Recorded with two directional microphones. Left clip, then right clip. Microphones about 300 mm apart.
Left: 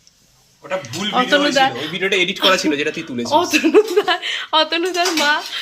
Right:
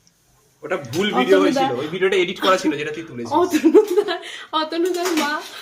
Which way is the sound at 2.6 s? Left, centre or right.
Centre.